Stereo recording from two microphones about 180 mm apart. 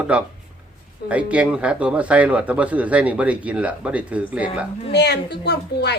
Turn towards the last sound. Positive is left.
turn(degrees=65)  # may be behind; listen again after turning